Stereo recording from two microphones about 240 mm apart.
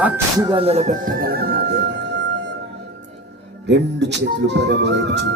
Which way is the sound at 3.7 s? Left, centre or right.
Right.